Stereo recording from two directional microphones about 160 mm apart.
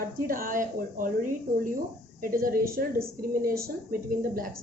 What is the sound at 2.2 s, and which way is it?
A woman's voice, 65° right (ahead or behind).